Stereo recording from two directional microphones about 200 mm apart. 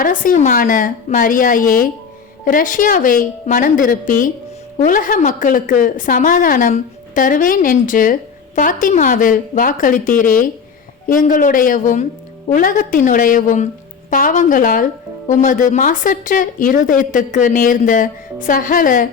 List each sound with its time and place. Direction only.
0.0 s a woman's voice: 45° left (ahead or behind)